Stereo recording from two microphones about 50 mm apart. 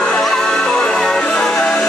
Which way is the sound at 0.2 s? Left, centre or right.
Centre.